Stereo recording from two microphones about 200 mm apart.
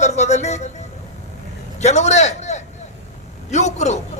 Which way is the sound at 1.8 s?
35° left (ahead or behind).